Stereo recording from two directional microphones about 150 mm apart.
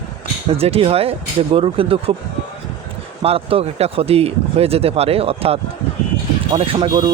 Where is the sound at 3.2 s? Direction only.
40° right (ahead or behind).